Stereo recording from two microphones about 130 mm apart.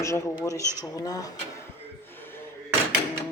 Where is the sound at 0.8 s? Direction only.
25° left (ahead or behind).